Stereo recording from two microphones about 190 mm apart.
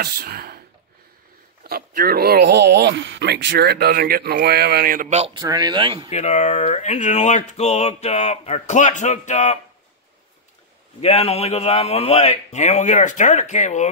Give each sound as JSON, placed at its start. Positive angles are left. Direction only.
{"t": 0.0, "sound": "speech", "side_deg": -55}
{"t": 5.1, "sound": "speech", "side_deg": -35}
{"t": 5.4, "sound": "speech", "side_deg": -20}
{"t": 6.0, "sound": "speech", "side_deg": 35}
{"t": 11.0, "sound": "speech", "side_deg": 35}